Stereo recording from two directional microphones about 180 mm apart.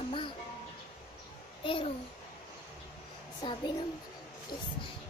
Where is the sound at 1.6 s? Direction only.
30° left (ahead or behind).